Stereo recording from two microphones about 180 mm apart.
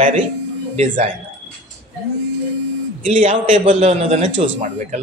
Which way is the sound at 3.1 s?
45° right (ahead or behind).